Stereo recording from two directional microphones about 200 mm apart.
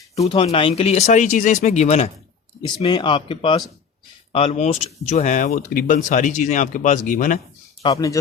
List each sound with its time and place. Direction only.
0.2 s speech: 25° left (ahead or behind)
2.6 s speech: 25° left (ahead or behind); by 7.3 s 40° left (ahead or behind)
7.8 s speech: 20° left (ahead or behind)